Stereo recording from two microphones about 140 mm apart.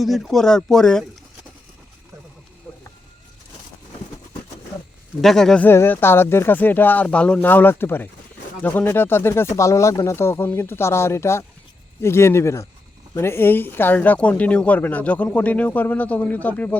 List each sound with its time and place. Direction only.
0.0 s speech: centre (ahead or behind)
5.2 s speech: 5° left (ahead or behind)
5.6 s speech: 15° left (ahead or behind)